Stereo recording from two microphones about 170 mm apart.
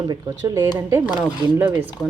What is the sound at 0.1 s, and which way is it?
Speech, 15° right (ahead or behind).